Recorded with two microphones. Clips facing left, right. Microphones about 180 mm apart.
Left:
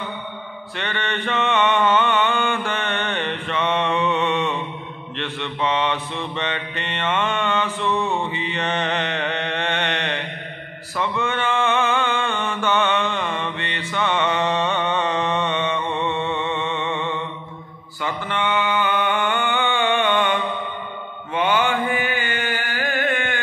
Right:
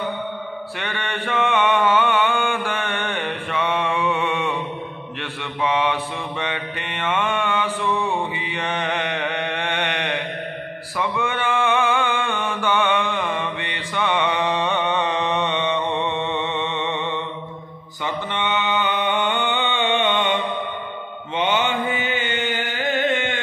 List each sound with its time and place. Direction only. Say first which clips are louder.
0.7 s mantra: left 4 dB; 10° right (ahead or behind)
21.4 s mantra: left 1 dB; 20° right (ahead or behind)